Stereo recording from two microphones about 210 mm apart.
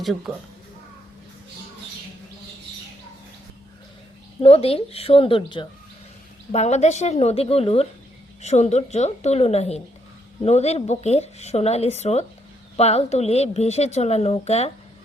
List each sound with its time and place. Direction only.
4.4 s a woman's voice: 30° left (ahead or behind)